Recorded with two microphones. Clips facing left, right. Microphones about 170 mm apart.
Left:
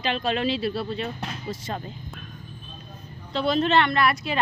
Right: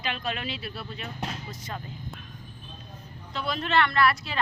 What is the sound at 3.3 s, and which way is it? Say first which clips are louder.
Speech: left 7 dB; 25° left (ahead or behind).